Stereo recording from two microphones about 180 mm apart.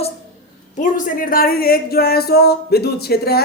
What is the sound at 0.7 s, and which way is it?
Speech, 45° left (ahead or behind).